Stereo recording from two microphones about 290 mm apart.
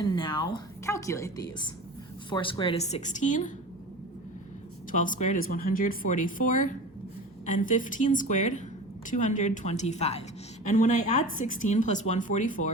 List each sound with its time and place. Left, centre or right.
0.0 s a woman's voice: centre
4.9 s a woman's voice: left